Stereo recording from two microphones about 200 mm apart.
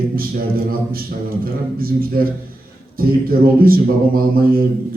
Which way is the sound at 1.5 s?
45° right (ahead or behind).